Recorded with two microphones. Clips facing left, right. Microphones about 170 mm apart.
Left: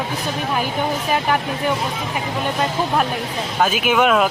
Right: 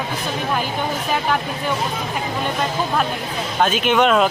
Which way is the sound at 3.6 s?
5° left (ahead or behind).